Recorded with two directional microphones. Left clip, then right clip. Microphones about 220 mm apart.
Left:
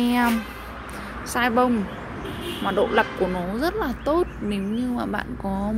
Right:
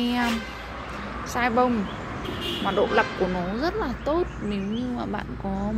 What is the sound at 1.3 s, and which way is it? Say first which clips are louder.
A child's voice: left 2 dB; 15° left (ahead or behind).